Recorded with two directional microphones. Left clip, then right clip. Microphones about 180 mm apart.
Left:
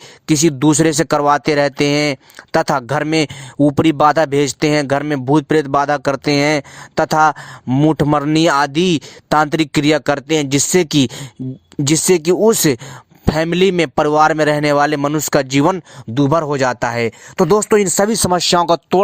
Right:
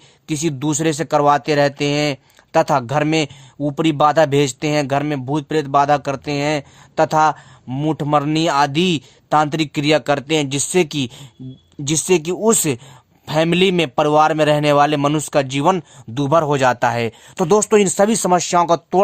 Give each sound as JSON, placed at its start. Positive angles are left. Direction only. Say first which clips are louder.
{"t": 0.3, "sound": "speech", "louder": "left 8 dB", "side_deg": 40}
{"t": 16.1, "sound": "speech", "louder": "left 1 dB", "side_deg": 20}